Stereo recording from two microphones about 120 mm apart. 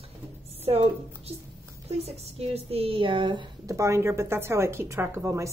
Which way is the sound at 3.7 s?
25° right (ahead or behind).